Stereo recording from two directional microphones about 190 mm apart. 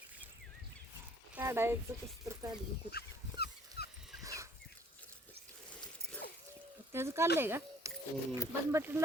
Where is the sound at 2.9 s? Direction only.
55° left (ahead or behind).